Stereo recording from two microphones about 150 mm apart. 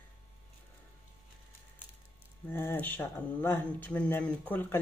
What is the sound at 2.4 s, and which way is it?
Speech, 15° left (ahead or behind).